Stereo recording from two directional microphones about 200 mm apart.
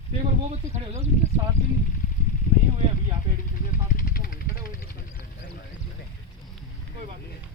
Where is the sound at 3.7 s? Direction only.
45° left (ahead or behind).